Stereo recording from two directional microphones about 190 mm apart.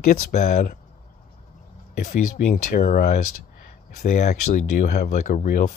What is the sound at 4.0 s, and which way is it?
Speech, 40° left (ahead or behind).